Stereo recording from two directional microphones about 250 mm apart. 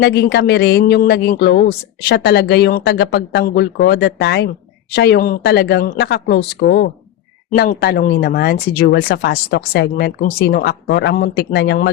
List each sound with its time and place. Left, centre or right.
0.0 s a man's voice: left